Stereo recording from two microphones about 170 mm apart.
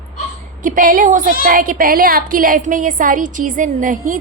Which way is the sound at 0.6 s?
55° right (ahead or behind).